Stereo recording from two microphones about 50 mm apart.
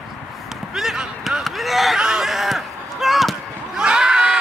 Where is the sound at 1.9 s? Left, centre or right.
Centre.